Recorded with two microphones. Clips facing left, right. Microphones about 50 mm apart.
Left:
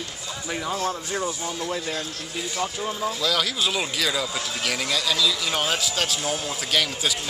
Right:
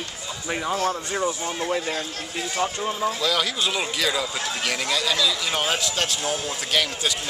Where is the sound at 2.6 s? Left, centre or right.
Centre.